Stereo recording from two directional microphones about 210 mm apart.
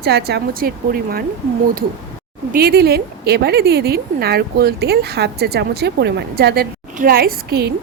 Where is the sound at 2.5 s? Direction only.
50° right (ahead or behind).